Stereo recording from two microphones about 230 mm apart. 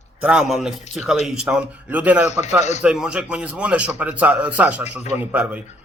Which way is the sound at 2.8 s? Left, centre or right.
Centre.